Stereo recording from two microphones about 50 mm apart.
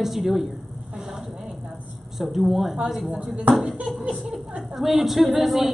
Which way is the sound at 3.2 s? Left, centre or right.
Right.